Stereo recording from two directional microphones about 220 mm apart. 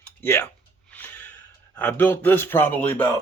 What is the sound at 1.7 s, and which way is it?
Speech, 5° left (ahead or behind).